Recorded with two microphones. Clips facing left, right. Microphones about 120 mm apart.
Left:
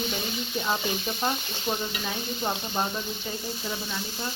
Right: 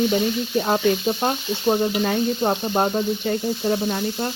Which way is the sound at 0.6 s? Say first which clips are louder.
Right 9 dB; 55° right (ahead or behind).